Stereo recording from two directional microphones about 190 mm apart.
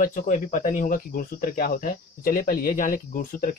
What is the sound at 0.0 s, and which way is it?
Speech, 45° left (ahead or behind).